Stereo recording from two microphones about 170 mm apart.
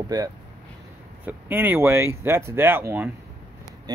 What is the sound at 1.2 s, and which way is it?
Speech, 10° right (ahead or behind).